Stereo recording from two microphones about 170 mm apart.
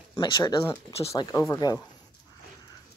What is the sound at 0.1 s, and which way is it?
Speech, 25° left (ahead or behind).